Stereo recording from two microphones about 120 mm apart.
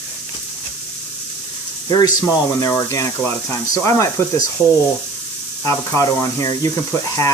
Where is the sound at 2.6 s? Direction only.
25° left (ahead or behind).